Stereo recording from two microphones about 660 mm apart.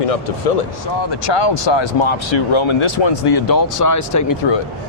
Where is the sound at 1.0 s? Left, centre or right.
Left.